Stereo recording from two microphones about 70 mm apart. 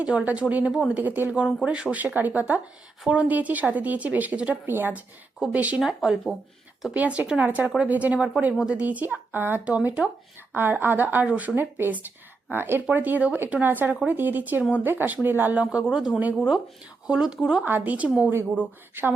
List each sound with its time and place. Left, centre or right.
0.0 s speech: centre
5.4 s speech: centre
5.8 s speech: centre
6.9 s speech: right
9.6 s speech: centre
10.5 s speech: right
15.6 s speech: centre
17.7 s speech: right